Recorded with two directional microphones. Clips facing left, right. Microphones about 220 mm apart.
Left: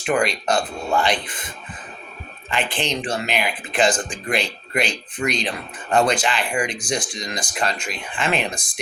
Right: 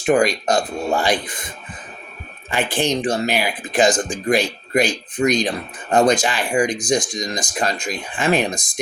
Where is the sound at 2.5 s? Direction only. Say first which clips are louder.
Right 4 dB; 45° right (ahead or behind).